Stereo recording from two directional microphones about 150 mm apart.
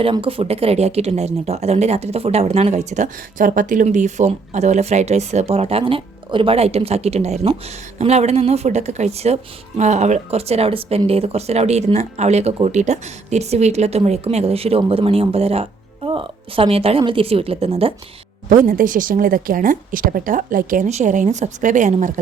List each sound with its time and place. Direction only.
0.0 s a woman's voice: 35° right (ahead or behind)
18.4 s a woman's voice: 65° right (ahead or behind)